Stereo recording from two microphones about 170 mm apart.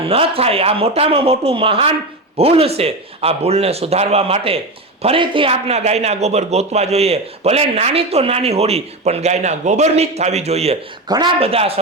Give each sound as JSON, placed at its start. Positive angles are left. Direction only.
{"t": 0.0, "sound": "a man's voice", "side_deg": -35}